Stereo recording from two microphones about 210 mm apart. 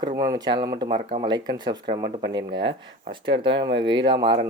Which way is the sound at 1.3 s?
20° right (ahead or behind).